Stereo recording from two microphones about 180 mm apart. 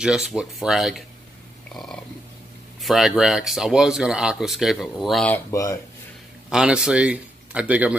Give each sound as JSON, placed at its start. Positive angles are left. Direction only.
{"t": 0.0, "sound": "speech", "side_deg": -5}
{"t": 1.7, "sound": "a sound", "side_deg": 5}
{"t": 2.8, "sound": "speech", "side_deg": 0}
{"t": 5.5, "sound": "speech", "side_deg": 20}
{"t": 6.5, "sound": "speech", "side_deg": -5}